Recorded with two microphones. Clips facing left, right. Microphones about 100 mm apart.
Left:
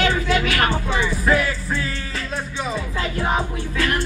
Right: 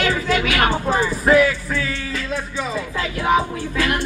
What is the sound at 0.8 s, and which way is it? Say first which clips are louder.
Speech: right 3 dB; 40° right (ahead or behind).